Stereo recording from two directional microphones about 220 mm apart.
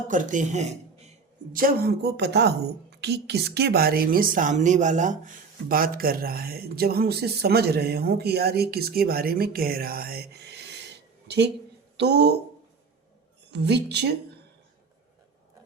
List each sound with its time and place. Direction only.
0.1 s speech: 35° right (ahead or behind)
1.5 s a woman's voice: 40° right (ahead or behind)
13.5 s a woman's voice: 50° right (ahead or behind)